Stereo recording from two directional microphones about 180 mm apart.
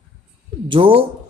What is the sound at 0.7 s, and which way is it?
Speech, 30° right (ahead or behind).